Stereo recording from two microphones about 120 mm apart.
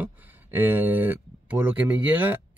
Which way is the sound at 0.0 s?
15° right (ahead or behind).